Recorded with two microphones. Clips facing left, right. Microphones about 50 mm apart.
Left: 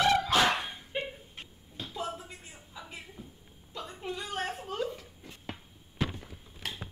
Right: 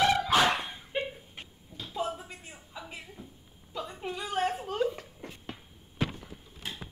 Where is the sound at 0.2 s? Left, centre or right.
Centre.